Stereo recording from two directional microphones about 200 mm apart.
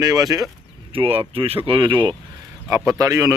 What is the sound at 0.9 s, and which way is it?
A man's voice, 30° right (ahead or behind).